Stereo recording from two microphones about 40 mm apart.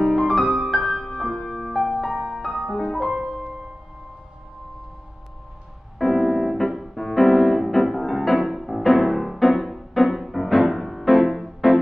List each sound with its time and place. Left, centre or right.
0.0 s music: centre
2.5 s music: centre
2.8 s music: centre
3.1 s music: right
5.9 s music: centre